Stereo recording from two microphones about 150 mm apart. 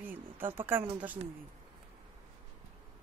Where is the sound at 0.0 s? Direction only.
15° right (ahead or behind).